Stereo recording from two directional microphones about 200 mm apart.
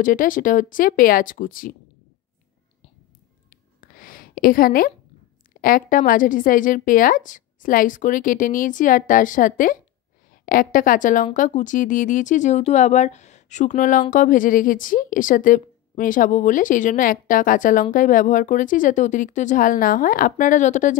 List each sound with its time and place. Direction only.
0.0 s a woman's voice: 40° left (ahead or behind)
3.8 s a sound: 45° left (ahead or behind)
5.6 s a woman's voice: 45° left (ahead or behind)